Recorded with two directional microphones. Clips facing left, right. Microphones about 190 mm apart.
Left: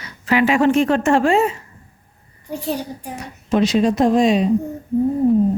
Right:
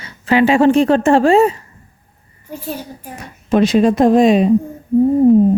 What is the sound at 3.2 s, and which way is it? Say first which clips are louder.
Speech: right 4 dB; 55° right (ahead or behind).